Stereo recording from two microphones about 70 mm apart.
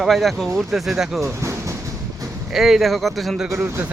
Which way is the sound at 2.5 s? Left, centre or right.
Centre.